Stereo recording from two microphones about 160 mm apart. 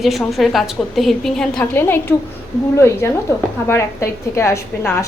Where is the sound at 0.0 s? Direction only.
Centre (ahead or behind).